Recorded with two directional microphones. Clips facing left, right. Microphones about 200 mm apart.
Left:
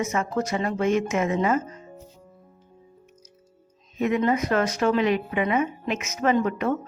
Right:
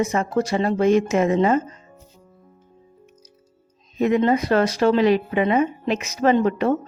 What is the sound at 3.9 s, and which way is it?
Speech, 35° right (ahead or behind).